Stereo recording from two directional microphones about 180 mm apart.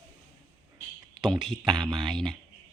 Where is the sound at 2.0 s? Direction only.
Centre (ahead or behind).